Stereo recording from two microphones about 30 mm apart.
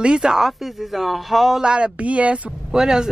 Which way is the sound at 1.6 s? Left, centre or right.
Right.